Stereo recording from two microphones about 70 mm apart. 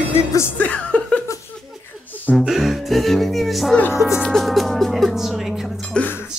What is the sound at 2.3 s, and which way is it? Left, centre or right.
Speech, centre.